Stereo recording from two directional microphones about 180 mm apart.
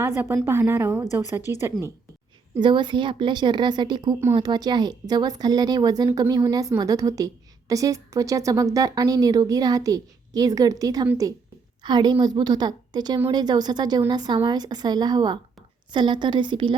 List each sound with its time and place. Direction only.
0.4 s a woman's voice: 15° right (ahead or behind)
2.6 s a woman's voice: 25° right (ahead or behind)